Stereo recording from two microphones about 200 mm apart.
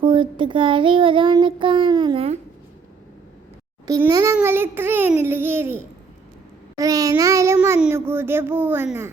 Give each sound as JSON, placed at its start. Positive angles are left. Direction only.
{"t": 0.0, "sound": "child singing", "side_deg": -25}
{"t": 3.8, "sound": "child singing", "side_deg": -20}